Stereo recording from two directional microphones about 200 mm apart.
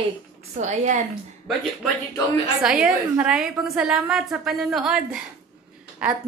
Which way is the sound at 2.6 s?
5° right (ahead or behind).